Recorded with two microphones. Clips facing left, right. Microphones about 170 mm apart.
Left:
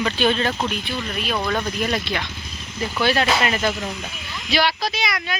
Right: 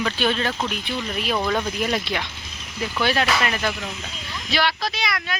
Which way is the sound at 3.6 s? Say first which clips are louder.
Left 3 dB; 20° left (ahead or behind).